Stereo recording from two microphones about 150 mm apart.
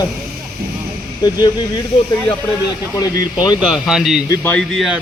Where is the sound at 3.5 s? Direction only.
5° right (ahead or behind).